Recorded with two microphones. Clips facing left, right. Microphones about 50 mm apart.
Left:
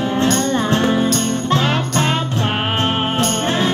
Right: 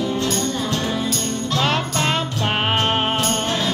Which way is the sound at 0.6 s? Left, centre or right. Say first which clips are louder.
Left 7 dB; left.